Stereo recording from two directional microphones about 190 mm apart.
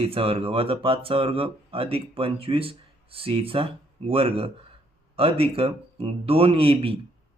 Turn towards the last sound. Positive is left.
turn(degrees=-30)  # may be behind; listen again after turning